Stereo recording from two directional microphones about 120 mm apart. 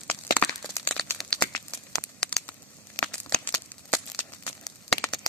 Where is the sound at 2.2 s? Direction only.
5° left (ahead or behind).